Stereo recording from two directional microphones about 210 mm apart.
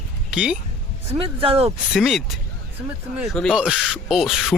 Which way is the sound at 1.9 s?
Centre (ahead or behind).